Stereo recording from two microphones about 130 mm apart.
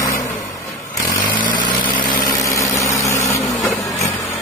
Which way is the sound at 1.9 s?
90° left.